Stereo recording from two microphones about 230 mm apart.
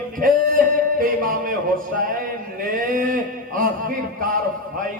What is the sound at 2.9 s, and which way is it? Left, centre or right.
A man's voice, right.